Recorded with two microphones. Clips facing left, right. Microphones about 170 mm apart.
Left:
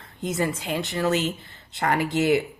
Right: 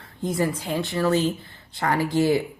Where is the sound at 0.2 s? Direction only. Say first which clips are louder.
Right 2 dB; 20° left (ahead or behind).